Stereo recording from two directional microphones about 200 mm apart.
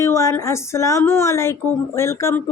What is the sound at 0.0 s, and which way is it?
Speech, 15° left (ahead or behind).